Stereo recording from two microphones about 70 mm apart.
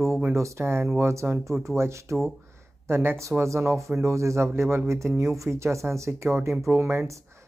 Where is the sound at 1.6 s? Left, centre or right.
Right.